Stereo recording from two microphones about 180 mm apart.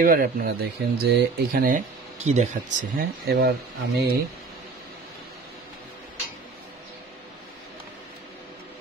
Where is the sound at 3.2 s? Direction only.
60° right (ahead or behind).